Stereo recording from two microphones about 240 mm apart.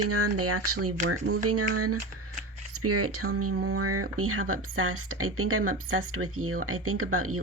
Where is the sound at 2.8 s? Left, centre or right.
Right.